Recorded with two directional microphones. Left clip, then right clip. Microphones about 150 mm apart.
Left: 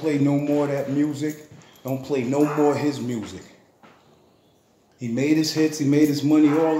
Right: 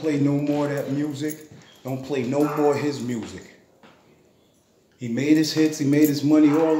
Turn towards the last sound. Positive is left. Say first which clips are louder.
# even
turn(degrees=20)  # may be behind; listen again after turning